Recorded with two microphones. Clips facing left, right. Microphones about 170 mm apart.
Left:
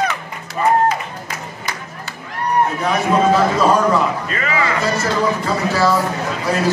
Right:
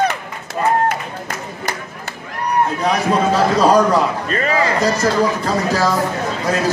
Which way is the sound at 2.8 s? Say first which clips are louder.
Left 1 dB; 35° right (ahead or behind).